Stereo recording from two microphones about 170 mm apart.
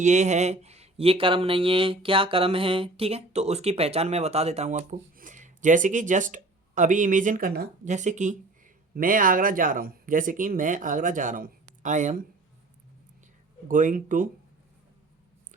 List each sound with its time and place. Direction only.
0.0 s speech: 45° right (ahead or behind); by 7.7 s 60° right (ahead or behind)
7.9 s speech: 45° right (ahead or behind)
13.7 s speech: 50° right (ahead or behind)